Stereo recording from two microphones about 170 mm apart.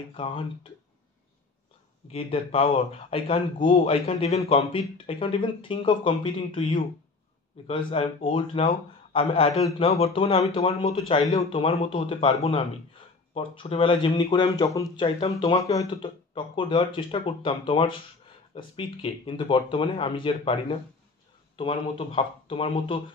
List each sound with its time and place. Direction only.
0.1 s speech: 30° left (ahead or behind)
2.0 s speech: 35° left (ahead or behind)
11.1 s speech: 25° left (ahead or behind)
15.0 s speech: 35° left (ahead or behind)
21.5 s speech: 35° left (ahead or behind)